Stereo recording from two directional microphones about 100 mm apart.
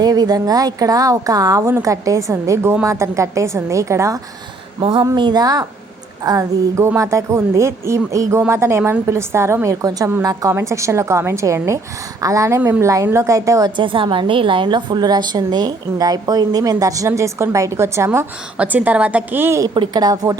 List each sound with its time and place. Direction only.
0.0 s a woman's voice: 40° right (ahead or behind)
4.8 s speech: 60° right (ahead or behind)
5.1 s a woman's voice: 45° right (ahead or behind); by 18.3 s 30° right (ahead or behind)
18.5 s a woman's voice: 15° right (ahead or behind)
19.6 s speech: 50° right (ahead or behind)